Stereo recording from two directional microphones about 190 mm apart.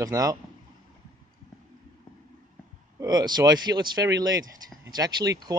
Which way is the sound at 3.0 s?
20° right (ahead or behind).